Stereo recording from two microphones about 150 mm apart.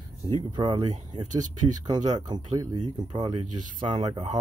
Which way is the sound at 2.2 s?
30° right (ahead or behind).